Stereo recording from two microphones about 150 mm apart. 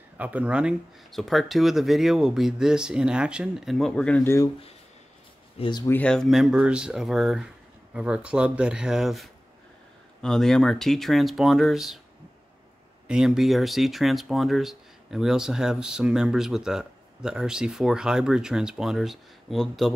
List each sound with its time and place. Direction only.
0.2 s speech: 10° right (ahead or behind); by 4.5 s 15° left (ahead or behind)
5.6 s speech: 30° left (ahead or behind)
5.9 s speech: 10° left (ahead or behind)
13.1 s speech: 5° right (ahead or behind)